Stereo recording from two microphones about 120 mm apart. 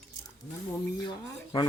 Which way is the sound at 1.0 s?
35° left (ahead or behind).